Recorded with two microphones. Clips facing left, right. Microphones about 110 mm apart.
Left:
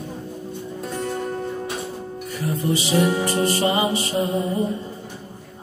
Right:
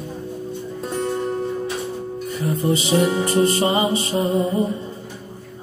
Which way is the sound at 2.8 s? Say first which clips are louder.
Left 1 dB; 25° right (ahead or behind).